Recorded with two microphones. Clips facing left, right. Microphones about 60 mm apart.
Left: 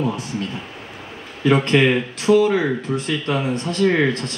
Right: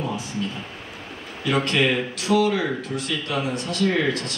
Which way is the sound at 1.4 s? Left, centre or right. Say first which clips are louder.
Left 6 dB; left.